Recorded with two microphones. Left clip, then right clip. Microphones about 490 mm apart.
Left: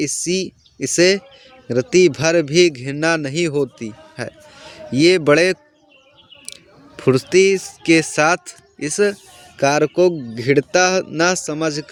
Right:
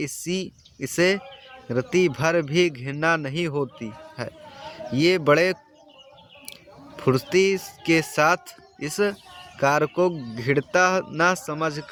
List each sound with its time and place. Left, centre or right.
0.0 s speech: right